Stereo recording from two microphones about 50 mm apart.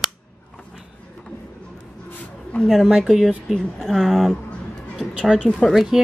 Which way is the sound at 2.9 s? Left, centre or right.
Centre.